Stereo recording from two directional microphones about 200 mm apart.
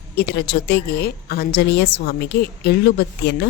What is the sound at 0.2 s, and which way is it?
A woman's voice, 55° left (ahead or behind).